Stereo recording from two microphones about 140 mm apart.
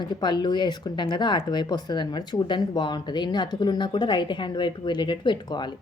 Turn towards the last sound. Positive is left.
turn(degrees=30)  # may be behind; listen again after turning